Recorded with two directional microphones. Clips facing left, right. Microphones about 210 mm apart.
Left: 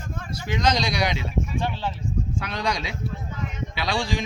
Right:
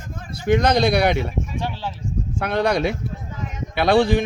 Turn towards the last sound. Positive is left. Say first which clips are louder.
# right 10 dB
turn(degrees=-60)  # may be behind; listen again after turning